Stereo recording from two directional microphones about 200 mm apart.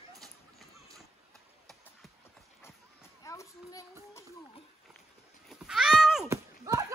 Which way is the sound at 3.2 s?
15° left (ahead or behind).